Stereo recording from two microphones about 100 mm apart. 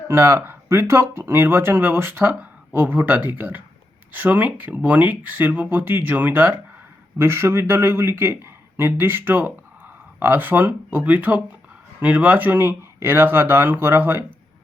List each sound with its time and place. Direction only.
0.1 s speech: 25° right (ahead or behind)